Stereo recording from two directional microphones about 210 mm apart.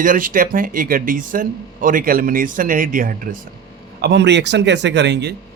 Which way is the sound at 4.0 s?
55° right (ahead or behind).